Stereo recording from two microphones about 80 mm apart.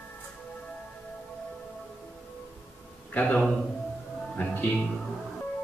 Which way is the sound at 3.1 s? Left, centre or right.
Centre.